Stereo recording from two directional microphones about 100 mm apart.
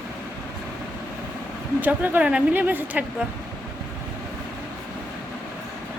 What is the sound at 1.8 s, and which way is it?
Speech, 15° right (ahead or behind).